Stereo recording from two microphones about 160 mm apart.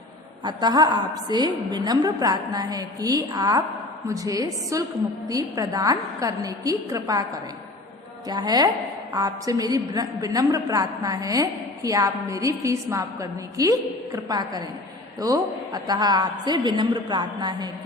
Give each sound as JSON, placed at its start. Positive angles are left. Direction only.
{"t": 0.4, "sound": "a woman's voice", "side_deg": -25}
{"t": 8.3, "sound": "a woman's voice", "side_deg": -25}